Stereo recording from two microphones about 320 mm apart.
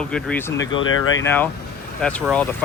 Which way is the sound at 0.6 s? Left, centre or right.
Left.